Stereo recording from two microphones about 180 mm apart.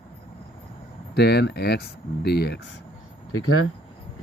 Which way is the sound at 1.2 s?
65° left (ahead or behind).